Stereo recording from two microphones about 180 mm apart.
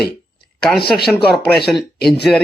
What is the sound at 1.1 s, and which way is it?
Speech, centre (ahead or behind).